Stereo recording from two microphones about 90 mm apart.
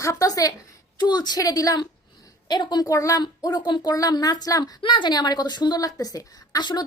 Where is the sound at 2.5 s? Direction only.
55° left (ahead or behind).